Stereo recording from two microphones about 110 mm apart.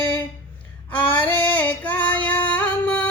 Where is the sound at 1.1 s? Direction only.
15° left (ahead or behind).